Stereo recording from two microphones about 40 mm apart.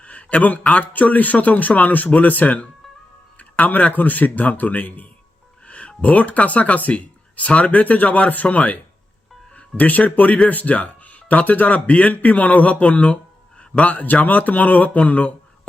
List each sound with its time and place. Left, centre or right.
0.0 s a sound: left
0.6 s a man's voice: left
0.9 s speech: left
3.3 s music: left
3.9 s speech: left